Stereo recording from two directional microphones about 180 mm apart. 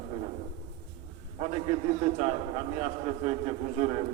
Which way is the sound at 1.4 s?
35° right (ahead or behind).